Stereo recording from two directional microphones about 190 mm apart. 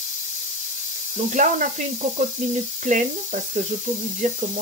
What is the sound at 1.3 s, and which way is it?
Speech, 40° right (ahead or behind).